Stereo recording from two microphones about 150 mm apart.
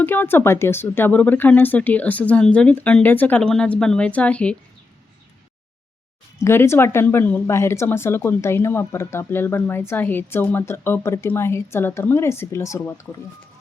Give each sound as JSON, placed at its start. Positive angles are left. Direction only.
{"t": 0.0, "sound": "speech", "side_deg": 15}
{"t": 6.4, "sound": "speech", "side_deg": 15}